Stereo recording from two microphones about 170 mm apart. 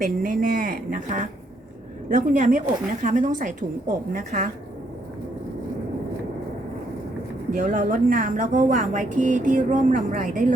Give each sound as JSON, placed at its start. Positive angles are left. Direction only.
{"t": 0.0, "sound": "speech", "side_deg": -50}
{"t": 7.5, "sound": "speech", "side_deg": -50}